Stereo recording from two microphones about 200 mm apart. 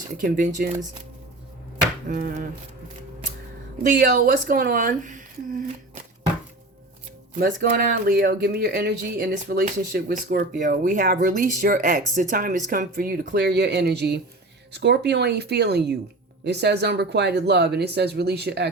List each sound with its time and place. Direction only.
0.2 s speech: 40° right (ahead or behind)
2.0 s speech: 45° right (ahead or behind)
3.8 s speech: 45° right (ahead or behind)
7.3 s speech: 45° right (ahead or behind)